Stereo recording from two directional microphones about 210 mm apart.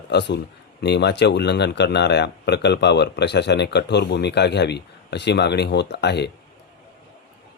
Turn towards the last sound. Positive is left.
turn(degrees=55)  # may be behind; listen again after turning